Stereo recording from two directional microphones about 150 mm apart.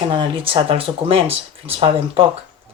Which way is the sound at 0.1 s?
35° right (ahead or behind).